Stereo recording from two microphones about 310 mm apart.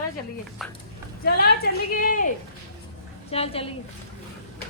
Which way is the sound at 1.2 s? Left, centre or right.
Left.